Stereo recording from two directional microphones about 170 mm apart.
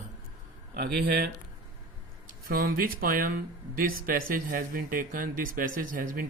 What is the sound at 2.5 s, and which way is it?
Speech, 55° right (ahead or behind).